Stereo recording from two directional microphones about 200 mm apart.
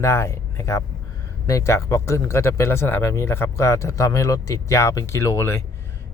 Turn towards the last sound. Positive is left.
turn(degrees=10)  # may be behind; listen again after turning